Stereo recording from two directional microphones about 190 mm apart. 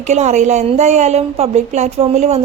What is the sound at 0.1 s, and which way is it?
A woman's voice, 35° right (ahead or behind).